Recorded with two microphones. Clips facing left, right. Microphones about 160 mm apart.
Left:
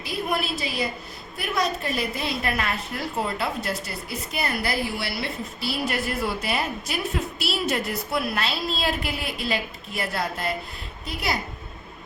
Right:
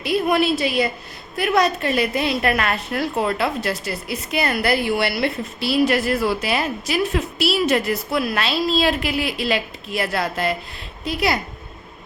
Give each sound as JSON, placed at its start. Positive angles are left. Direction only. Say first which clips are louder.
{"t": 0.0, "sound": "a woman's voice", "louder": "right 9 dB", "side_deg": -75}
{"t": 11.0, "sound": "a woman's voice", "louder": "right 7 dB", "side_deg": -75}